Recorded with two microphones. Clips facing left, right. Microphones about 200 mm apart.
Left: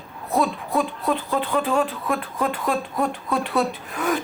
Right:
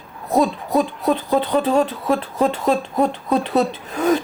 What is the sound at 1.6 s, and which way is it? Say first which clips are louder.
Speech: right 5 dB; 25° right (ahead or behind).